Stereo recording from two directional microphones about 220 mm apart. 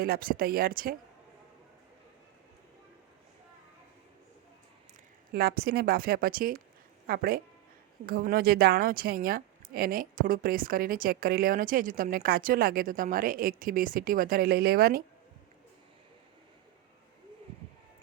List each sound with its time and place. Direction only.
0.0 s a woman's voice: 40° right (ahead or behind)
5.3 s a woman's voice: 45° right (ahead or behind)